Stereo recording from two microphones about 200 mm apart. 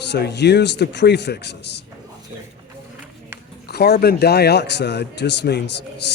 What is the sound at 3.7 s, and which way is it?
A man's voice, 55° left (ahead or behind).